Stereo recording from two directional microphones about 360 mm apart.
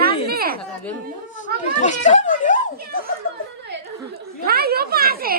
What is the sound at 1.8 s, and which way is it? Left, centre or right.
Speech, centre.